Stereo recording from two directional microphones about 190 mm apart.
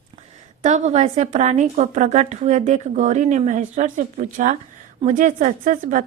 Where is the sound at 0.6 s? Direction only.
35° right (ahead or behind).